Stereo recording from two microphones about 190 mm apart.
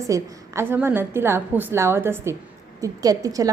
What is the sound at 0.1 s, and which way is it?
A woman's voice, 15° right (ahead or behind).